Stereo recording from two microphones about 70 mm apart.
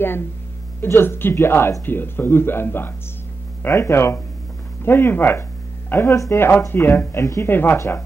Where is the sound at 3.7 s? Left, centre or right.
Left.